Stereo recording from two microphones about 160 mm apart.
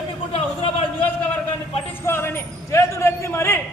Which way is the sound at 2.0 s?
15° left (ahead or behind).